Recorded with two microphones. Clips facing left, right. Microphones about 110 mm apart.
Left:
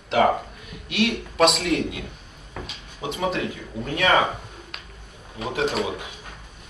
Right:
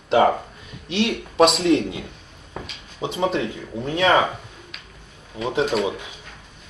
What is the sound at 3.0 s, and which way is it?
Speech, 25° right (ahead or behind).